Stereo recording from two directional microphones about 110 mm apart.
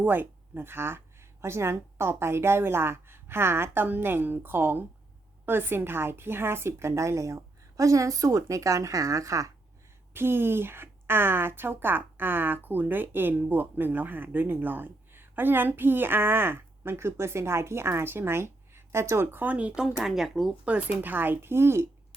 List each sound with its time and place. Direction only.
0.0 s a woman's voice: 20° right (ahead or behind); by 20.5 s centre (ahead or behind)
20.7 s speech: 15° right (ahead or behind)